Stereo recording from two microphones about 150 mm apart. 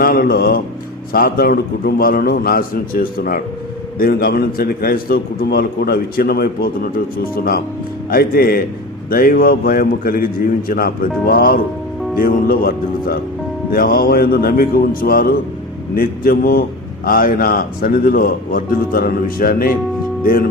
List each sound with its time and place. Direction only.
0.0 s a man's voice: 85° left
3.9 s a man's voice: 85° left